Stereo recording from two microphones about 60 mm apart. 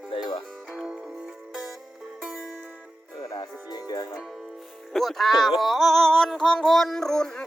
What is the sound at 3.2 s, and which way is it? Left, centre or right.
Music, left.